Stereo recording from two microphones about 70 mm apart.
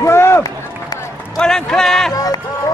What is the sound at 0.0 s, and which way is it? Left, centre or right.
Run, left.